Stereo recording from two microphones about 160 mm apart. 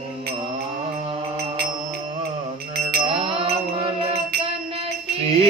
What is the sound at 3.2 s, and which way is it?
Music, 35° right (ahead or behind).